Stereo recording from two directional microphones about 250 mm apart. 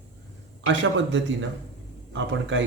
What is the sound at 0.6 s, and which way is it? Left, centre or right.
Speech, right.